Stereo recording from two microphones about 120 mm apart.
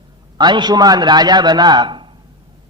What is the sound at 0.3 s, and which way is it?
A man's voice, 35° right (ahead or behind).